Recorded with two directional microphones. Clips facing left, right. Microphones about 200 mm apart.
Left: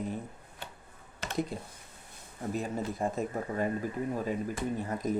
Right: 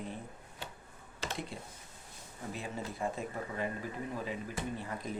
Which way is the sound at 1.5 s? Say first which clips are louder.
Left 5 dB; 40° left (ahead or behind).